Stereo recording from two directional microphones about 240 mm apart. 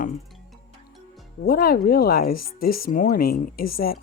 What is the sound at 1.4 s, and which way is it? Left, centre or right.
Speech, left.